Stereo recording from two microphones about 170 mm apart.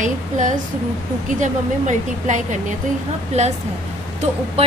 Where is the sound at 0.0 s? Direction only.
45° right (ahead or behind).